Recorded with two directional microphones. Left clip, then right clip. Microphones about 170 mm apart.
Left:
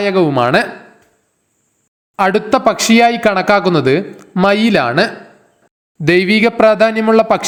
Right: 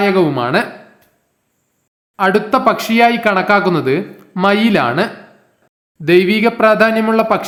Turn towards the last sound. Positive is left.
turn(degrees=30)  # may be behind; listen again after turning